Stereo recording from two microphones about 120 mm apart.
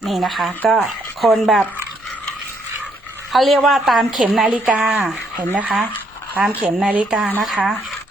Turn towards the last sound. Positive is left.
turn(degrees=-5)  # may be behind; listen again after turning